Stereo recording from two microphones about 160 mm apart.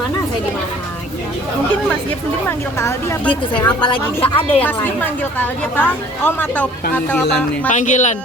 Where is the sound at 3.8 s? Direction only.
35° left (ahead or behind).